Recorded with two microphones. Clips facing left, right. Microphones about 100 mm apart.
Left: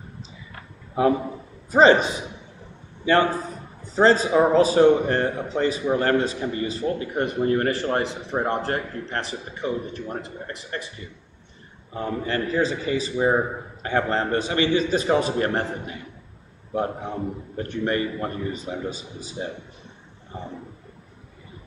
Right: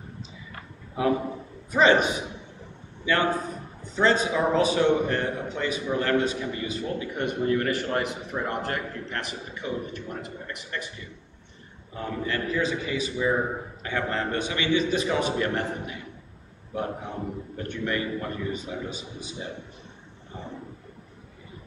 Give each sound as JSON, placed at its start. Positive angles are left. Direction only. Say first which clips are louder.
{"t": 1.7, "sound": "a man's voice", "louder": "left 4 dB", "side_deg": 35}
{"t": 3.8, "sound": "a man's voice", "louder": "left 5 dB", "side_deg": 35}
{"t": 11.9, "sound": "a man's voice", "louder": "left 4 dB", "side_deg": 35}